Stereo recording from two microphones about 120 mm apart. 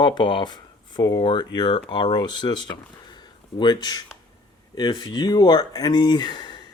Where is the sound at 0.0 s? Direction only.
40° left (ahead or behind).